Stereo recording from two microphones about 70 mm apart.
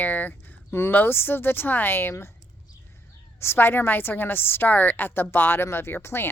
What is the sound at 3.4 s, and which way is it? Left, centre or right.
A woman's voice, left.